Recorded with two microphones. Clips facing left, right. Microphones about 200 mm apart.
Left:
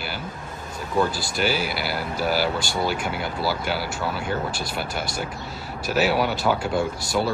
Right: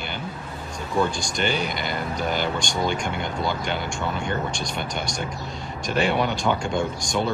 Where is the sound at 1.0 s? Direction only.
5° left (ahead or behind).